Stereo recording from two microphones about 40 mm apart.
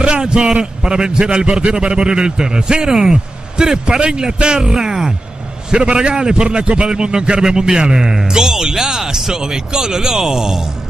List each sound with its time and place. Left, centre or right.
0.0 s a man's voice: right